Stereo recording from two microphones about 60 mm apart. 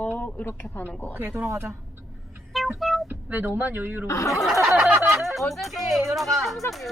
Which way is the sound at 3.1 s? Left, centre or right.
Right.